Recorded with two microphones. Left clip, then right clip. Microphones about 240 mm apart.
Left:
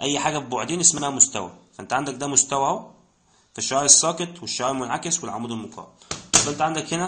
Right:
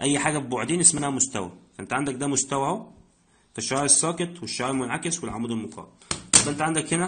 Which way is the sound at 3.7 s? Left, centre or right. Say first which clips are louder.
Left 6 dB; right.